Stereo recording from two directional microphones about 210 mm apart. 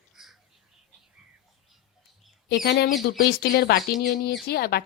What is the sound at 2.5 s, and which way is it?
A woman's voice, 50° left (ahead or behind).